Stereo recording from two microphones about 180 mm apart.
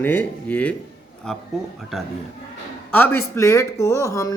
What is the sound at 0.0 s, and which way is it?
Speech, 10° left (ahead or behind).